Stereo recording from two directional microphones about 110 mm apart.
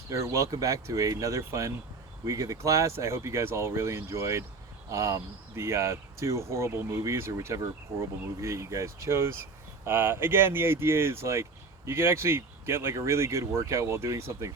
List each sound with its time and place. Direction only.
0.1 s speech: 30° right (ahead or behind)